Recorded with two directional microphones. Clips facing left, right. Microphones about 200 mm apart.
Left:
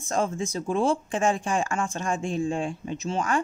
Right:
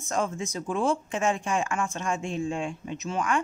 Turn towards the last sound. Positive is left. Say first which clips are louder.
# left 1 dB
turn(degrees=30)  # may be behind; listen again after turning